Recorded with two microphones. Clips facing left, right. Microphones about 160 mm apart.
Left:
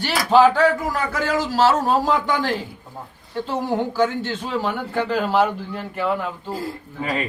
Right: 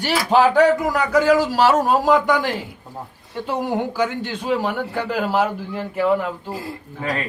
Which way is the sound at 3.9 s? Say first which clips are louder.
Left 2 dB; 15° right (ahead or behind).